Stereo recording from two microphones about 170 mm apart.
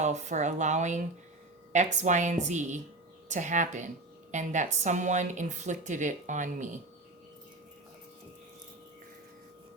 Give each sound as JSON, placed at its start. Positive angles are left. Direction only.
{"t": 0.0, "sound": "a woman's voice", "side_deg": -45}